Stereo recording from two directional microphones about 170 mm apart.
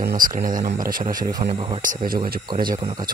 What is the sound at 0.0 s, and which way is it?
Speech, 55° right (ahead or behind).